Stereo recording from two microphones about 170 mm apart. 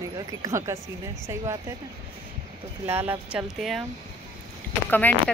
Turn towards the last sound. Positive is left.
turn(degrees=10)  # may be behind; listen again after turning